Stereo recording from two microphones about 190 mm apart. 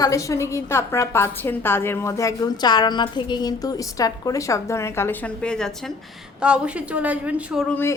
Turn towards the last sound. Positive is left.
turn(degrees=10)  # may be behind; listen again after turning